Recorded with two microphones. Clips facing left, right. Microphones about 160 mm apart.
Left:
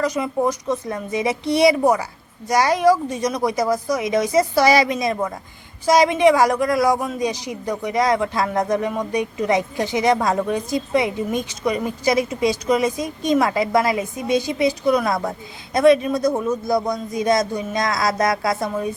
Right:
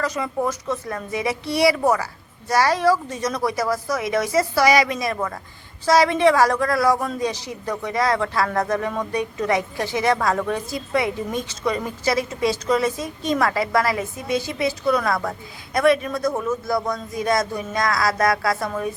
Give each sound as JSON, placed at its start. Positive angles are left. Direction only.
{"t": 0.0, "sound": "speech", "side_deg": 15}